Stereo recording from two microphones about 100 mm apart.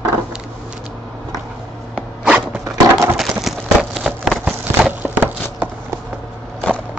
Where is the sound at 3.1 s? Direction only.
5° right (ahead or behind).